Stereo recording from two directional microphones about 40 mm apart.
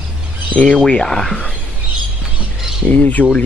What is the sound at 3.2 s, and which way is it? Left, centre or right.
Speech, left.